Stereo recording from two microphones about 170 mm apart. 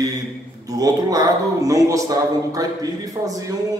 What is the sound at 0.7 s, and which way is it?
A man's voice, 20° right (ahead or behind).